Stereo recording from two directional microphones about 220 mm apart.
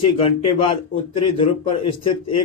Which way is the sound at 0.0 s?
25° left (ahead or behind).